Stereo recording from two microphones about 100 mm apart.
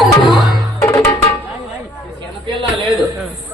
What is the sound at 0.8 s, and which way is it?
Music, 35° left (ahead or behind).